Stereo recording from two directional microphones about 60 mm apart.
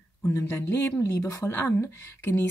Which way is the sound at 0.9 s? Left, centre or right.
Left.